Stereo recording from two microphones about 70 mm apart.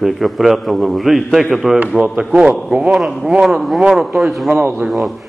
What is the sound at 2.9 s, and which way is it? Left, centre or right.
A man's voice, centre.